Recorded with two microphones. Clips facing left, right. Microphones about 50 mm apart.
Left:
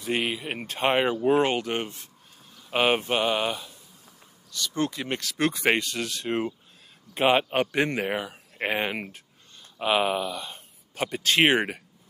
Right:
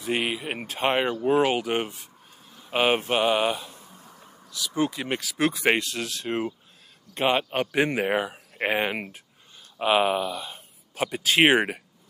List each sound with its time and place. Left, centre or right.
0.0 s speech: centre
1.5 s speech: centre
3.7 s a sound: right
4.5 s a man's voice: centre
7.7 s speech: centre